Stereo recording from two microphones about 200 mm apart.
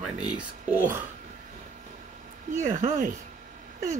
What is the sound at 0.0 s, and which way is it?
Speech, 5° right (ahead or behind).